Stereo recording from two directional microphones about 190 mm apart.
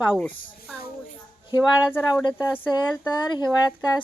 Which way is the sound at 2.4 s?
10° left (ahead or behind).